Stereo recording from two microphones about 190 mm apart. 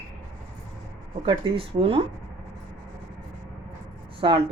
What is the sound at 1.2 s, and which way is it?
Speech, 30° right (ahead or behind).